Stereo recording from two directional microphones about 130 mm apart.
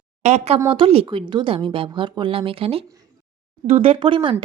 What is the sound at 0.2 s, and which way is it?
Speech, 60° right (ahead or behind).